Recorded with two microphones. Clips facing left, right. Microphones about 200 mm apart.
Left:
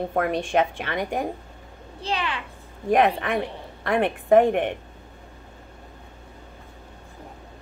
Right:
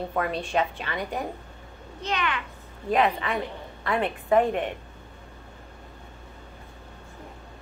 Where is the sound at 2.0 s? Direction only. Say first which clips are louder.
Left 1 dB; 30° left (ahead or behind).